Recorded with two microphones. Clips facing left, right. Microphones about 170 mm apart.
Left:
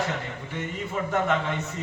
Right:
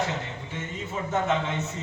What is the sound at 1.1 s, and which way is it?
Speech, 20° right (ahead or behind).